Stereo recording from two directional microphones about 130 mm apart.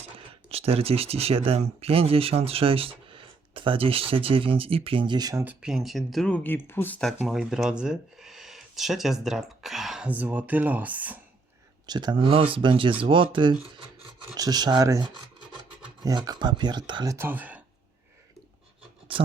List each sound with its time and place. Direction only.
0.4 s speech: 50° right (ahead or behind); by 5.5 s 25° right (ahead or behind)
5.5 s speech: 5° right (ahead or behind); by 7.0 s 15° left (ahead or behind)
7.2 s speech: 5° right (ahead or behind)
11.9 s speech: 35° right (ahead or behind)
14.3 s speech: 30° right (ahead or behind)
16.0 s speech: 30° right (ahead or behind)
17.2 s speech: 15° right (ahead or behind)